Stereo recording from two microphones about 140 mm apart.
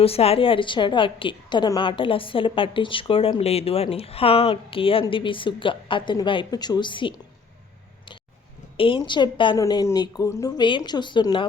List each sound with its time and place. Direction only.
0.0 s a woman's voice: 45° left (ahead or behind)
8.8 s a woman's voice: 35° left (ahead or behind)
9.6 s a woman's voice: 25° left (ahead or behind)